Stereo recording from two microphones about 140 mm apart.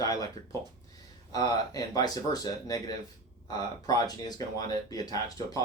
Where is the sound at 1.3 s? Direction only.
25° left (ahead or behind).